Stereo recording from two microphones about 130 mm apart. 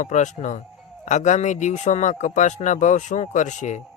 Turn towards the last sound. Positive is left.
turn(degrees=70)  # may be behind; listen again after turning